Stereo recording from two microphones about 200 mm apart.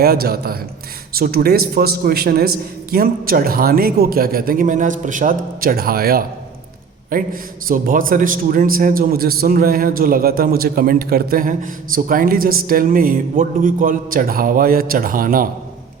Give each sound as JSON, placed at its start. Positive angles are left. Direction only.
{"t": 0.0, "sound": "a man's voice", "side_deg": -50}